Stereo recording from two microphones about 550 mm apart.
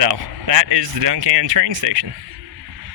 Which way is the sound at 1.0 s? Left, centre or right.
Right.